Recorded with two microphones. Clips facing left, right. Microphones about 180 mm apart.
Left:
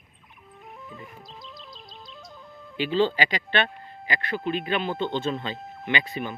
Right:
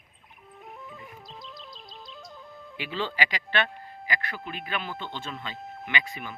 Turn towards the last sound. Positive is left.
turn(degrees=30)  # may be behind; listen again after turning